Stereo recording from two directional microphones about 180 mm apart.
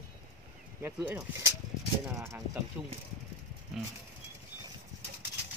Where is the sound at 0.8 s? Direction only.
10° right (ahead or behind).